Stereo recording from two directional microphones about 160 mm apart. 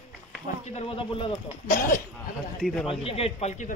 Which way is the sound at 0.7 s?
40° left (ahead or behind).